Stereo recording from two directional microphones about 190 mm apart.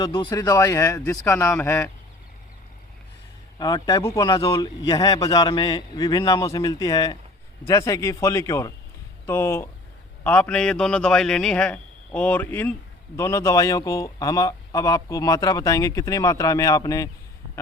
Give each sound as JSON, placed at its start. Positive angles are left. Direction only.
{"t": 0.0, "sound": "speech", "side_deg": 25}
{"t": 3.6, "sound": "a man's voice", "side_deg": 20}